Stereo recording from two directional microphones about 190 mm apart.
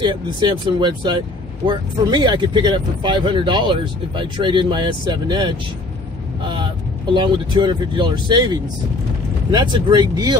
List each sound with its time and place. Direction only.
0.0 s speech: 25° right (ahead or behind)